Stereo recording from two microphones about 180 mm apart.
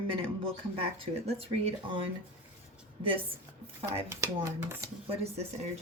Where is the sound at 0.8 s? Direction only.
35° right (ahead or behind).